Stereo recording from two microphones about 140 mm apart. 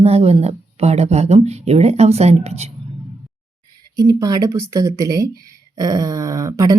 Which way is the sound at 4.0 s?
25° right (ahead or behind).